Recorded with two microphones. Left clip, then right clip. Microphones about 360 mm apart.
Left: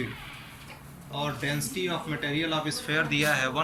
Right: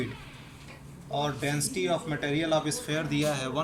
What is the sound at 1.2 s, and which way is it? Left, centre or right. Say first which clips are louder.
Speech: left 1 dB; centre.